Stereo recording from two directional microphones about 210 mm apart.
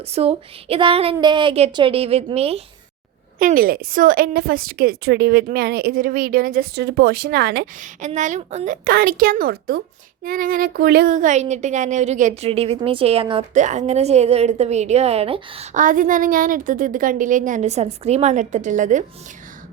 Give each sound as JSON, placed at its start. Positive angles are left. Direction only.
{"t": 0.1, "sound": "speech", "side_deg": -30}
{"t": 3.3, "sound": "a woman's voice", "side_deg": -40}
{"t": 8.0, "sound": "speech", "side_deg": -35}